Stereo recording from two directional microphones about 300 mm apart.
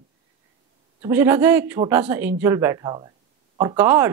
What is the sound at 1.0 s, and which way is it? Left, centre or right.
Speech, centre.